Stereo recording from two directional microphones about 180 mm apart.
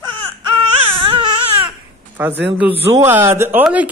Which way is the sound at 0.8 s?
10° right (ahead or behind).